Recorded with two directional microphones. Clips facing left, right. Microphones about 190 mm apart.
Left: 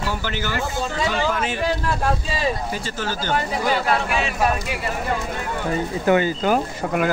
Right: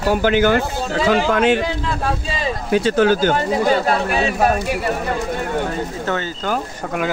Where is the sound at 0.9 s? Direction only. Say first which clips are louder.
Right 9 dB; 85° right.